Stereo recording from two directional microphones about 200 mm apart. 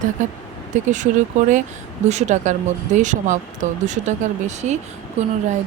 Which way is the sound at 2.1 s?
35° right (ahead or behind).